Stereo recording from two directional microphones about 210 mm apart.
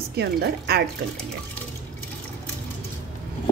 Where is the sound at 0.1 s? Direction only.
50° right (ahead or behind).